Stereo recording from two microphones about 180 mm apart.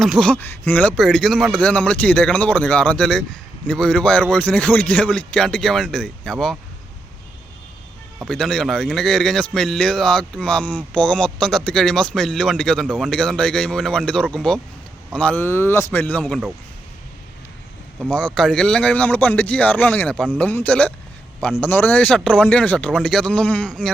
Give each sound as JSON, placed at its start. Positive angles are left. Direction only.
{"t": 0.0, "sound": "a man's voice", "side_deg": 0}
{"t": 8.3, "sound": "a man's voice", "side_deg": 5}
{"t": 16.2, "sound": "a man's voice", "side_deg": 0}
{"t": 18.0, "sound": "speech", "side_deg": 5}